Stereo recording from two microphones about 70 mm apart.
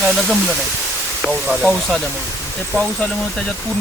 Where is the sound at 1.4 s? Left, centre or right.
Centre.